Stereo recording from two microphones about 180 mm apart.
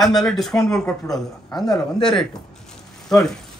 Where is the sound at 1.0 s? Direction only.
20° left (ahead or behind).